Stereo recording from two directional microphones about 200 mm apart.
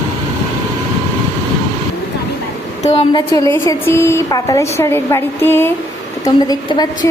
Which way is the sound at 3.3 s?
15° left (ahead or behind).